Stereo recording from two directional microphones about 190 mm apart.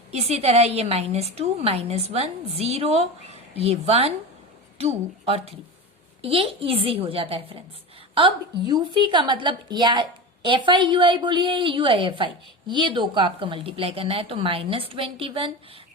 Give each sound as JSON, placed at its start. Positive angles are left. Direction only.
{"t": 0.1, "sound": "a woman's voice", "side_deg": -35}